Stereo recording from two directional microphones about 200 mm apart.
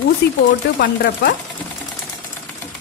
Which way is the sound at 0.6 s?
55° left (ahead or behind).